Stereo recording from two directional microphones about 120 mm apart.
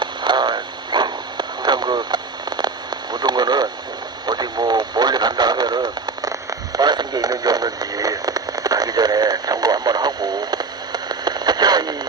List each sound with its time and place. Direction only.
0.0 s radio: 40° right (ahead or behind)